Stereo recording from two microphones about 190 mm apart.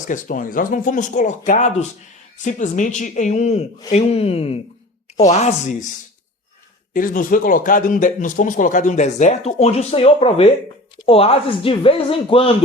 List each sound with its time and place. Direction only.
0.1 s a man's voice: 45° left (ahead or behind)
6.9 s a man's voice: 45° left (ahead or behind); by 12.5 s 30° left (ahead or behind)